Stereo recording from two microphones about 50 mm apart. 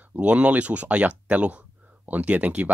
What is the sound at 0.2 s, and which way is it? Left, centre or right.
Speech, right.